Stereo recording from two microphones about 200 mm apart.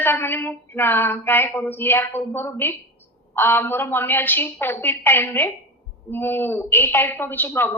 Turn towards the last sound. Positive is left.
turn(degrees=10)  # may be behind; listen again after turning